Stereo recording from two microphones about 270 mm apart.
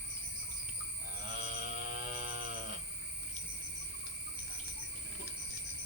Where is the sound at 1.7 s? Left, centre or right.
Right.